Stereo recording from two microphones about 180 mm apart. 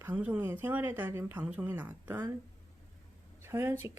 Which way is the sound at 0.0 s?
10° right (ahead or behind).